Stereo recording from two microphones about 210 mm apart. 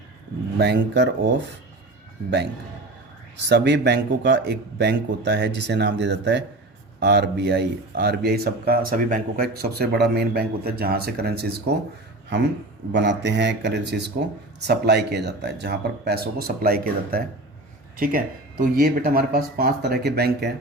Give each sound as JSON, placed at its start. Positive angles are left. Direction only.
{"t": 0.6, "sound": "speech", "side_deg": -55}
{"t": 3.5, "sound": "speech", "side_deg": -55}
{"t": 12.9, "sound": "a man's voice", "side_deg": -55}